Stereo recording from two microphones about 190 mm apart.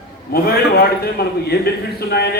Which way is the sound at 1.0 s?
55° left (ahead or behind).